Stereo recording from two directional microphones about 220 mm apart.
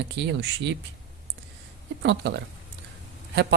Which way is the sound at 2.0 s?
50° right (ahead or behind).